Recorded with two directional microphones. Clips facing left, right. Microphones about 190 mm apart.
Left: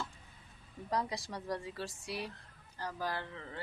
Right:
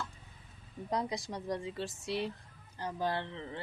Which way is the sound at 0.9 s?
20° right (ahead or behind).